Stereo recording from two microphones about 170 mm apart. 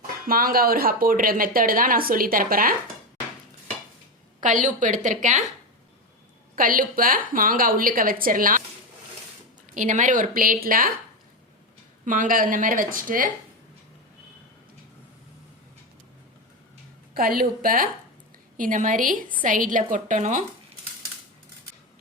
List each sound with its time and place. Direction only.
0.3 s a woman's voice: 60° right (ahead or behind)
4.4 s speech: 50° right (ahead or behind)
6.6 s a woman's voice: 55° right (ahead or behind)
9.7 s speech: 45° right (ahead or behind)
12.0 s speech: 50° right (ahead or behind)
17.2 s a woman's voice: 60° right (ahead or behind)